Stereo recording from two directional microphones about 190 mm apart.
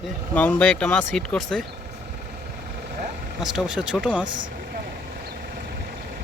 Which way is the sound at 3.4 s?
5° right (ahead or behind).